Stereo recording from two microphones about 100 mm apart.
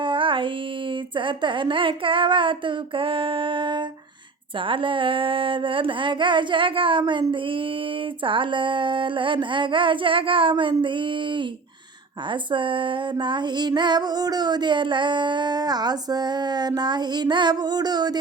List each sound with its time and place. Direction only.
0.0 s female singing: 55° right (ahead or behind)
1.1 s a sound: 55° right (ahead or behind)
12.3 s female singing: 55° right (ahead or behind)